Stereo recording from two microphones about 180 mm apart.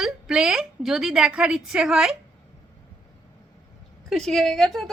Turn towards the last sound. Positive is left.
turn(degrees=0)  # may be behind; listen again after turning